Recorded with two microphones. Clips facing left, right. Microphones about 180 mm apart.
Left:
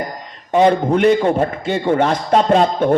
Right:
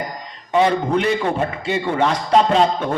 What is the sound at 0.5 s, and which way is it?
A man's voice, 50° left (ahead or behind).